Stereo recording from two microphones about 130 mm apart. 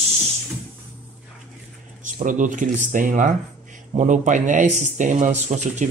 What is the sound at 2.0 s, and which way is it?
Speech, 75° right (ahead or behind).